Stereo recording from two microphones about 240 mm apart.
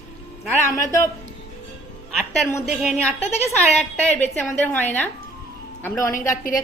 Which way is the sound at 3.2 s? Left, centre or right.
Left.